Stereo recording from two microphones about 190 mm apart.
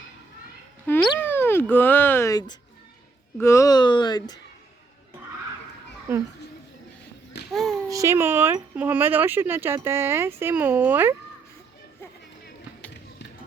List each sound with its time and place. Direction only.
0.9 s a sound: 10° left (ahead or behind)
3.3 s speech: 15° left (ahead or behind)
7.5 s child singing: centre (ahead or behind)
7.9 s speech: 15° right (ahead or behind)